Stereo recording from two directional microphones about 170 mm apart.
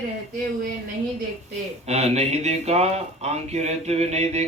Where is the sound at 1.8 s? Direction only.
40° right (ahead or behind).